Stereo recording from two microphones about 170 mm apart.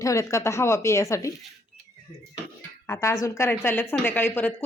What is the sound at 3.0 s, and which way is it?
Speech, 20° left (ahead or behind).